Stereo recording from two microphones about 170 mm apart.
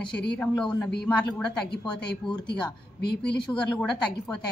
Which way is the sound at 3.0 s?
75° left (ahead or behind).